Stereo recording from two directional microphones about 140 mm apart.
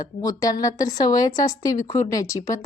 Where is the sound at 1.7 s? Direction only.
60° left (ahead or behind).